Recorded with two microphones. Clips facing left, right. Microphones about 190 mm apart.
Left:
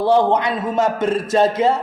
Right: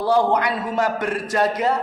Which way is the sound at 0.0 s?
25° left (ahead or behind).